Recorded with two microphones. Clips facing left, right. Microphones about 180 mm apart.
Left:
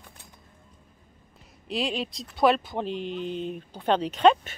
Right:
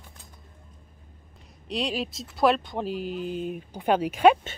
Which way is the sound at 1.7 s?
Centre (ahead or behind).